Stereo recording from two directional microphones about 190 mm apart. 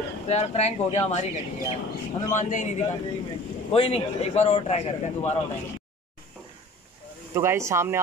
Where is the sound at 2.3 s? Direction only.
40° left (ahead or behind).